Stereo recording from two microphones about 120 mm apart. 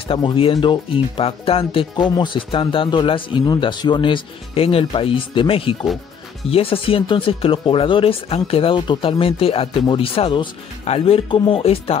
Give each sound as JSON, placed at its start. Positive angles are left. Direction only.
{"t": 0.1, "sound": "speech", "side_deg": 45}